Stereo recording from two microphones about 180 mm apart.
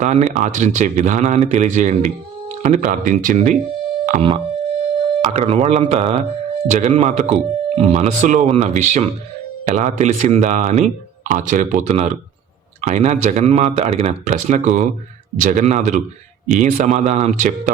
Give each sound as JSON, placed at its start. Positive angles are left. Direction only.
{"t": 0.0, "sound": "speech", "side_deg": -40}
{"t": 4.2, "sound": "speech", "side_deg": -30}